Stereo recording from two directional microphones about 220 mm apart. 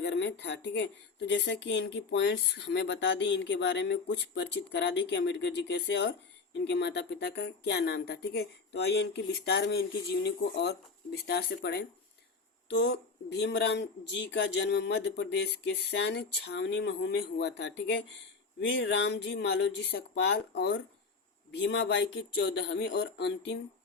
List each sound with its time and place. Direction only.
0.0 s speech: 50° left (ahead or behind)